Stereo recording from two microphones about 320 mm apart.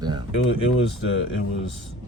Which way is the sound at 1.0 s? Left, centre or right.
Left.